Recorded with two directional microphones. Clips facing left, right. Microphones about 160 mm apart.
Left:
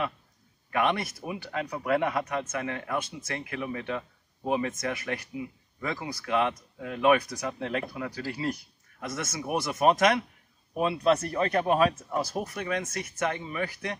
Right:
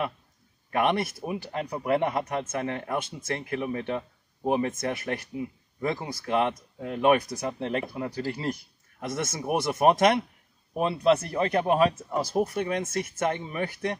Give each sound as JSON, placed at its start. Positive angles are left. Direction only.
{"t": 0.7, "sound": "speech", "side_deg": -30}
{"t": 12.3, "sound": "speech", "side_deg": -30}